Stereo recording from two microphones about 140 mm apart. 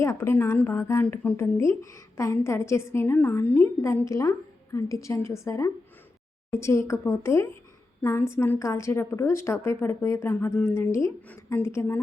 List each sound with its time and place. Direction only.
0.0 s a woman's voice: 20° left (ahead or behind)